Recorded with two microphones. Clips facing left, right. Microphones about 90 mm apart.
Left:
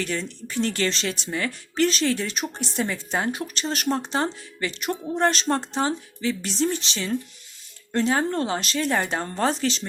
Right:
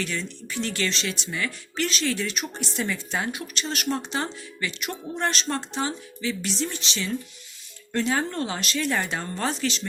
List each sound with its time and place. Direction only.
0.0 s speech: 40° left (ahead or behind)
7.9 s speech: 30° left (ahead or behind)